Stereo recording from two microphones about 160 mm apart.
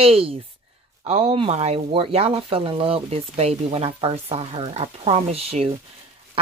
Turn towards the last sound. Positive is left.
turn(degrees=-40)  # may be behind; listen again after turning